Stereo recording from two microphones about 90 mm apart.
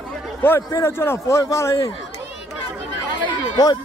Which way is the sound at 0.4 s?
30° left (ahead or behind).